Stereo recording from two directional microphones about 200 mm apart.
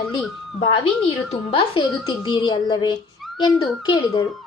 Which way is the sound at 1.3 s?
25° left (ahead or behind).